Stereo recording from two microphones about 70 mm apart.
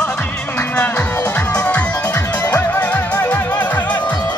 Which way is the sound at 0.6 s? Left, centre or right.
Left.